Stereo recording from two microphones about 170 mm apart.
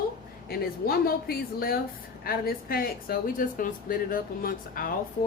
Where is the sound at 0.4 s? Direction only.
65° left (ahead or behind).